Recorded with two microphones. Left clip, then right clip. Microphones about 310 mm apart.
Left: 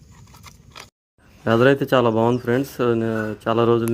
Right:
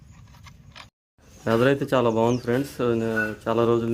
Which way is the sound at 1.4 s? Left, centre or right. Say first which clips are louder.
Left 4 dB; centre.